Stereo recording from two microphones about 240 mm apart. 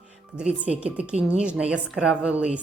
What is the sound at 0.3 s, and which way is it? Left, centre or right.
Speech, centre.